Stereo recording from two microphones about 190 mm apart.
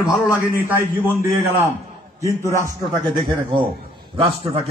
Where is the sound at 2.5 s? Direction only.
15° right (ahead or behind).